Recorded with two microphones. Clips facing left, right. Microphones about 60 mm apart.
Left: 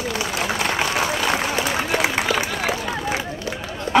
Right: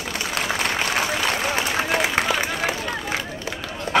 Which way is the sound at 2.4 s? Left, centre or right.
Centre.